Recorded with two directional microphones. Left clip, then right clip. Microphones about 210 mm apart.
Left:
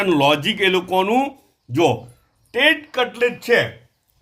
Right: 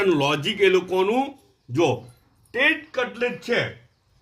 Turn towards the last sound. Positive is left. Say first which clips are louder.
# left 7 dB
turn(degrees=50)  # may be behind; listen again after turning